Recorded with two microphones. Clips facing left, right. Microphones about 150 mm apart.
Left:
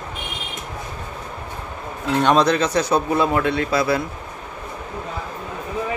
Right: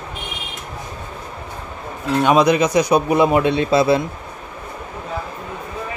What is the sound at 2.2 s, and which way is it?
A man's voice, 10° right (ahead or behind).